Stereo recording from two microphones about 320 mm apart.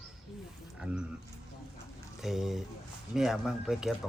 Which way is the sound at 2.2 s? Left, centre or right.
Centre.